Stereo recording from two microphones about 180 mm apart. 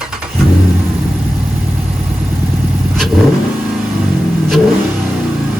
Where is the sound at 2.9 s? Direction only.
Centre (ahead or behind).